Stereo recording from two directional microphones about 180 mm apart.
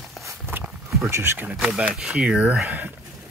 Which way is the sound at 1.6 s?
5° right (ahead or behind).